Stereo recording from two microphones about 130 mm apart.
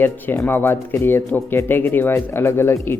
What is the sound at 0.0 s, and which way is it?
A man's voice, 15° left (ahead or behind).